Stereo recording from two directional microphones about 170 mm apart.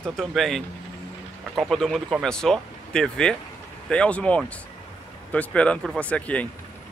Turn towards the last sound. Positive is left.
turn(degrees=10)  # may be behind; listen again after turning